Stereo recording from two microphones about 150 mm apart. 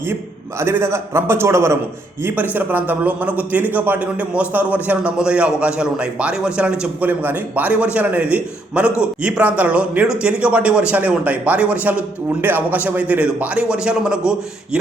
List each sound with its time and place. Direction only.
0.6 s a man's voice: 15° right (ahead or behind)